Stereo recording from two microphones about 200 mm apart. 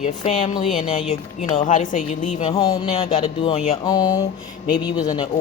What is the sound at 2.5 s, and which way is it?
Speech, 20° left (ahead or behind).